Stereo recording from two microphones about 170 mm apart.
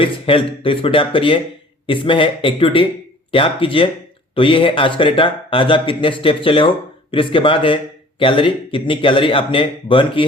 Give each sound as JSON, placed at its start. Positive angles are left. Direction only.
{"t": 0.0, "sound": "speech", "side_deg": 30}